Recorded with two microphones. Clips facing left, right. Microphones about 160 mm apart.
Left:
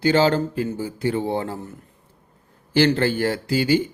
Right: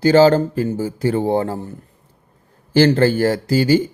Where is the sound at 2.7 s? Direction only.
40° right (ahead or behind).